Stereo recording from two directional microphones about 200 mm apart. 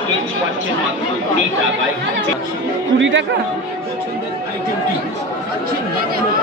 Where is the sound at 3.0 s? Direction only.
65° right (ahead or behind).